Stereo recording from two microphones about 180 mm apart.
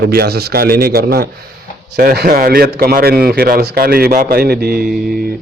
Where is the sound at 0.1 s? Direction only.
60° right (ahead or behind).